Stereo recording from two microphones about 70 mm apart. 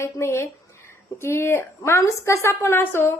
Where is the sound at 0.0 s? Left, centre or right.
Left.